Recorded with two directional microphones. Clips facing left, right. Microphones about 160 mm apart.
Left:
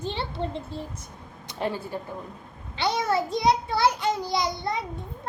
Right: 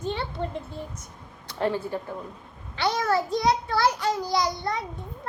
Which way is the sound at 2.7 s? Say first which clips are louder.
Right 1 dB; 25° left (ahead or behind).